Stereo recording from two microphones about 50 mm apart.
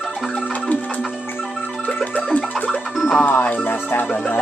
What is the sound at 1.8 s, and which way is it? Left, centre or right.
Music, left.